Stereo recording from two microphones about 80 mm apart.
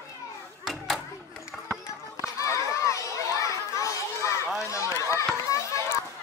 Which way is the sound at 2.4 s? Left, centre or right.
Left.